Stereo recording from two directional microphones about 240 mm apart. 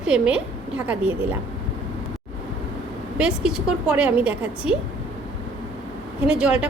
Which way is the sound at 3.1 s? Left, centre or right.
Centre.